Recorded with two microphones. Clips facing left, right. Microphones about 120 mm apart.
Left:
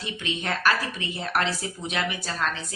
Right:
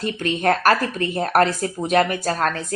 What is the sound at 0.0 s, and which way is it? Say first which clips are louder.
A woman's voice: right 10 dB; 50° right (ahead or behind).